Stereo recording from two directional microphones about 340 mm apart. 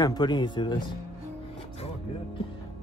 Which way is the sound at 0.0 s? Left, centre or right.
Centre.